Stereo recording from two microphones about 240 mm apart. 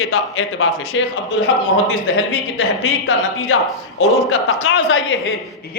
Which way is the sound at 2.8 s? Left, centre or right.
Left.